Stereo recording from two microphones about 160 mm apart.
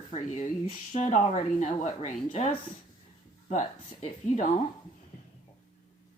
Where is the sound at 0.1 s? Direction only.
45° left (ahead or behind).